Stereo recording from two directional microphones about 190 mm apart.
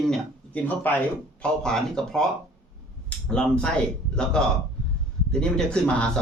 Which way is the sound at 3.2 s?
5° left (ahead or behind).